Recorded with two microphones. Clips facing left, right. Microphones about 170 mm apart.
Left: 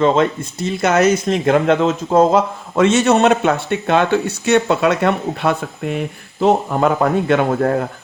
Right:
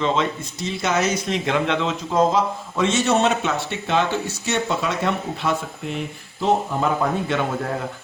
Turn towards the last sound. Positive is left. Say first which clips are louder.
# left 8 dB
turn(degrees=55)  # may be behind; listen again after turning